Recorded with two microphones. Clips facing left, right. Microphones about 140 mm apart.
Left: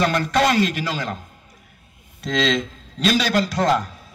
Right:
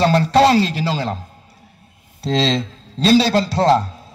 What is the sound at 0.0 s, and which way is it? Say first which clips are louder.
A man's voice: right 6 dB; 30° right (ahead or behind).